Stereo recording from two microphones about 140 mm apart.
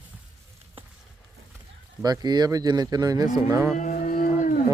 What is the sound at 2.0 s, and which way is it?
Speech, 30° right (ahead or behind).